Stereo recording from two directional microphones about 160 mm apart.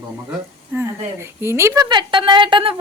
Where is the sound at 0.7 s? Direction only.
15° right (ahead or behind).